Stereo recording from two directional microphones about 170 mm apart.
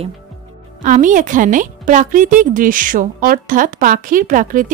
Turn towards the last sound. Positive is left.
turn(degrees=-50)  # may be behind; listen again after turning